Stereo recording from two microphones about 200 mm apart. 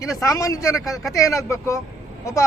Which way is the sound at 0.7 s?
Centre (ahead or behind).